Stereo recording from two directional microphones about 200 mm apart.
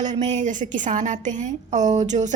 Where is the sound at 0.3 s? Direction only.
35° right (ahead or behind).